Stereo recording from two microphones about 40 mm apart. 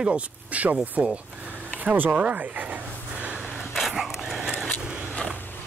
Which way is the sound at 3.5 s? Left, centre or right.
Centre.